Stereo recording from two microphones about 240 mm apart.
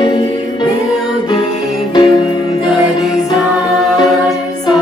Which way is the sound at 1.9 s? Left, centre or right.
Centre.